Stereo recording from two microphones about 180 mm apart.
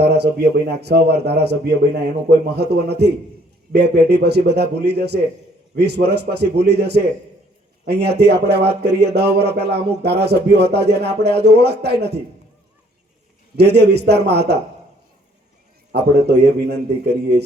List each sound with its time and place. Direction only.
0.2 s a man's voice: 65° right (ahead or behind)
13.6 s a man's voice: 65° right (ahead or behind)
15.9 s a man's voice: 65° right (ahead or behind)